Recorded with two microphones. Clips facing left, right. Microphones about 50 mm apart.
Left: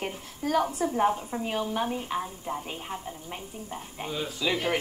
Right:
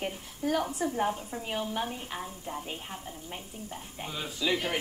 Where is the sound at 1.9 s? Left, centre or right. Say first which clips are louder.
Left 7 dB; centre.